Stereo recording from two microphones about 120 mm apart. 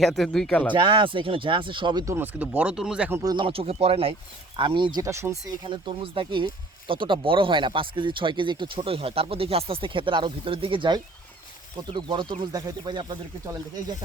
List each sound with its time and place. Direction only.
0.0 s speech: centre (ahead or behind)
0.7 s speech: 40° right (ahead or behind)
2.0 s speech: 15° right (ahead or behind)
3.1 s speech: 30° right (ahead or behind)
3.3 s speech: 50° right (ahead or behind)
4.5 s speech: 45° right (ahead or behind)
5.0 s speech: 25° right (ahead or behind)
5.6 s speech: 45° right (ahead or behind)